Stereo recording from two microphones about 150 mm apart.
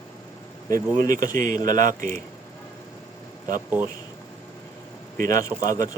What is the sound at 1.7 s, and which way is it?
Speech, 60° right (ahead or behind).